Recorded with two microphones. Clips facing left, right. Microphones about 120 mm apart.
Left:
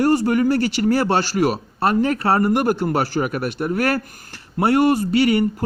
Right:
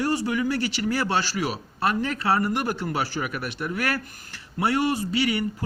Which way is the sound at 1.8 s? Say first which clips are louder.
Left 6 dB; 40° left (ahead or behind).